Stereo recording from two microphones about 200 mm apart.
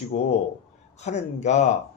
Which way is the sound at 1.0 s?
35° left (ahead or behind).